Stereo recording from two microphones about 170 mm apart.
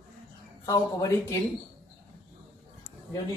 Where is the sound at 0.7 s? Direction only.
20° left (ahead or behind).